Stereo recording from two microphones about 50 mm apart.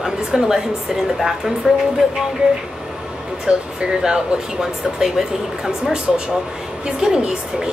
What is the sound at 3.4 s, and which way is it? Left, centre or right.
Speech, centre.